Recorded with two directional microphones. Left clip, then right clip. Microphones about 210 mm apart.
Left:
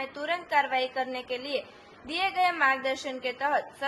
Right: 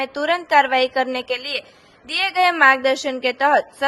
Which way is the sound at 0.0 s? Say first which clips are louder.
Right 11 dB; 40° right (ahead or behind).